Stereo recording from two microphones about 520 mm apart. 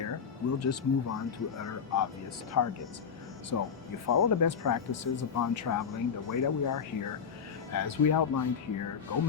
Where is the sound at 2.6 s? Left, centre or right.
Left.